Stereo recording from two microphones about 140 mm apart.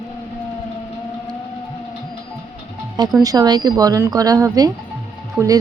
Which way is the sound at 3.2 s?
30° right (ahead or behind).